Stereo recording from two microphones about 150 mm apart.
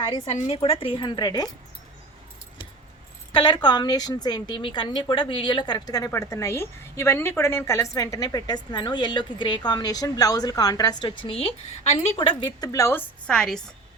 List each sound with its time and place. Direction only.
0.3 s speech: 40° left (ahead or behind)
3.3 s a woman's voice: 30° left (ahead or behind); by 13.6 s 5° left (ahead or behind)